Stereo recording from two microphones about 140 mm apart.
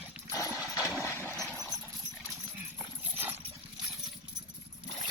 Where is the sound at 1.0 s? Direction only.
15° left (ahead or behind).